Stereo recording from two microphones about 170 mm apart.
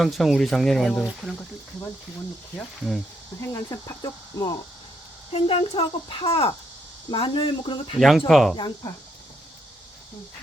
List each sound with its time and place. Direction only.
0.0 s speech: centre (ahead or behind)
2.6 s speech: centre (ahead or behind)
3.4 s speech: 20° left (ahead or behind)
5.3 s speech: 35° left (ahead or behind)
7.9 s speech: centre (ahead or behind)
8.5 s speech: 25° left (ahead or behind)